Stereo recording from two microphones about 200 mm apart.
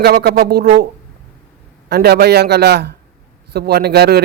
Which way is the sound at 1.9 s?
55° right (ahead or behind).